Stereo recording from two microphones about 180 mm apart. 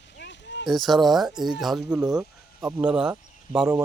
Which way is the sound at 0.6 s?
Centre (ahead or behind).